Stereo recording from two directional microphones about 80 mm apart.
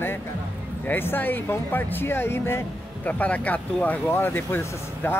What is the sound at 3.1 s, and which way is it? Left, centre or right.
Speech, centre.